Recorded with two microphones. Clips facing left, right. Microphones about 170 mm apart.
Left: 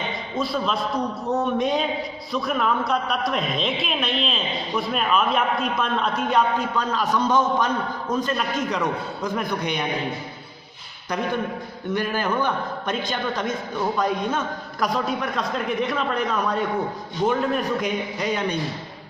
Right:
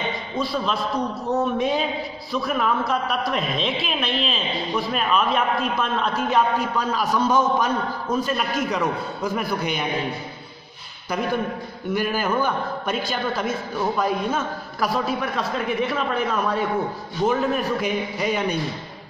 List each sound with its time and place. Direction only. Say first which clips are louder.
0.4 s a woman's voice: even; centre (ahead or behind)
11.9 s a woman's voice: right 1 dB; 5° right (ahead or behind)